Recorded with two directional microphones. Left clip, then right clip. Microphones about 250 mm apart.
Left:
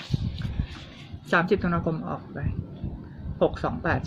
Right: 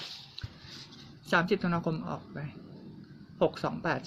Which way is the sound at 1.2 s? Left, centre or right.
Centre.